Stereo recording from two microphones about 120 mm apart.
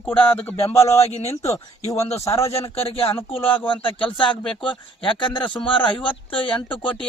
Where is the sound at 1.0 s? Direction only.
65° left (ahead or behind).